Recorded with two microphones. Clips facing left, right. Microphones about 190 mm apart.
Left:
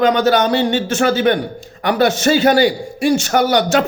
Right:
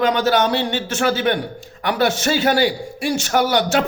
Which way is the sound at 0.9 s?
45° left (ahead or behind).